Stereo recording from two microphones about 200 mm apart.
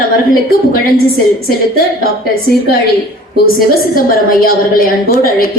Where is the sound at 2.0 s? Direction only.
50° left (ahead or behind).